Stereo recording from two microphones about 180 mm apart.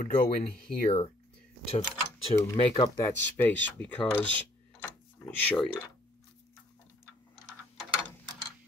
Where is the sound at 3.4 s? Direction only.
10° left (ahead or behind).